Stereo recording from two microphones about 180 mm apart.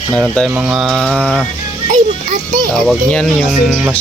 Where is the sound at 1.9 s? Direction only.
50° right (ahead or behind).